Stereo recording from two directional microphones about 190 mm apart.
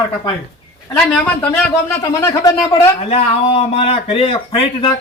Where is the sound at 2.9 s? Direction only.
35° left (ahead or behind).